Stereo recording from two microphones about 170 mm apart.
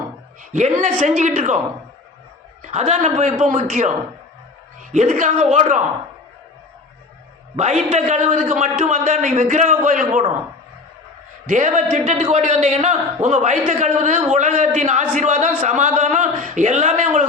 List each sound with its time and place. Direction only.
0.5 s a man's voice: 50° right (ahead or behind)
7.5 s a man's voice: 40° right (ahead or behind)
11.4 s a man's voice: 45° right (ahead or behind)